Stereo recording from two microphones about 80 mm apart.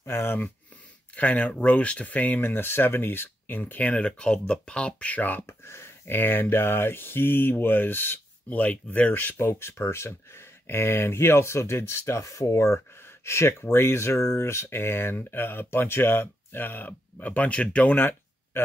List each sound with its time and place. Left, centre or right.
0.0 s speech: left